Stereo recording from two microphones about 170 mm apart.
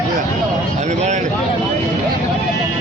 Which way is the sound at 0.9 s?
45° right (ahead or behind).